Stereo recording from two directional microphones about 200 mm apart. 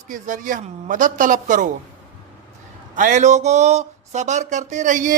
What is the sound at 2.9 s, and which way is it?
A man's voice, 40° right (ahead or behind).